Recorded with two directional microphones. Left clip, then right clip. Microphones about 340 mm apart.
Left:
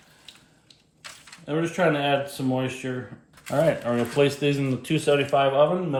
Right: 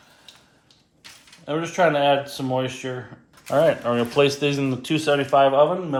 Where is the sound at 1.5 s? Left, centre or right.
Centre.